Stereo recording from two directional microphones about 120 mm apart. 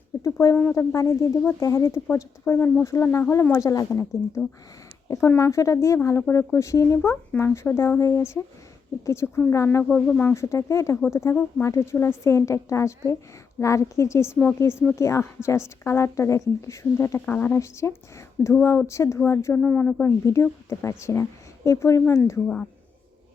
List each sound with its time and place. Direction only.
0.2 s speech: 25° left (ahead or behind)
3.5 s speech: 30° left (ahead or behind)
9.9 s speech: 10° left (ahead or behind)
10.4 s speech: 25° left (ahead or behind)
17.2 s speech: 15° left (ahead or behind)
18.4 s speech: 5° left (ahead or behind)
18.9 s speech: 25° left (ahead or behind)
19.6 s speech: 10° left (ahead or behind)